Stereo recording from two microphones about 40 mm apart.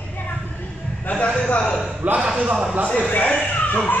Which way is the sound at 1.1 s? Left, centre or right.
Left.